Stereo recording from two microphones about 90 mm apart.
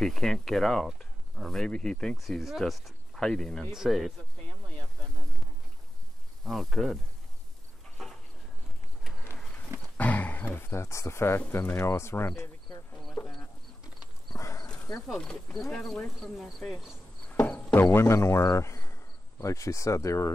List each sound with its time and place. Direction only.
0.0 s speech: 5° left (ahead or behind)
6.4 s speech: centre (ahead or behind)
8.0 s a sound: centre (ahead or behind)
9.9 s speech: 15° left (ahead or behind)
13.2 s a sound: 20° left (ahead or behind)
14.3 s clip-clop: 35° left (ahead or behind)
15.1 s speech: 5° left (ahead or behind)
17.5 s a sound: 10° left (ahead or behind)
17.7 s speech: 30° left (ahead or behind)